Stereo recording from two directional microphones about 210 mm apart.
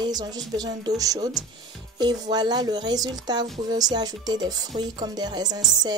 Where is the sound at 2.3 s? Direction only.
20° right (ahead or behind).